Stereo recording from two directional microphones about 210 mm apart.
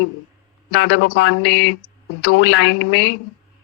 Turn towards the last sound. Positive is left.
turn(degrees=60)  # may be behind; listen again after turning